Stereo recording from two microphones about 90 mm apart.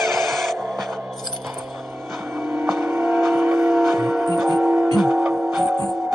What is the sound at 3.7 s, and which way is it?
Music, centre (ahead or behind).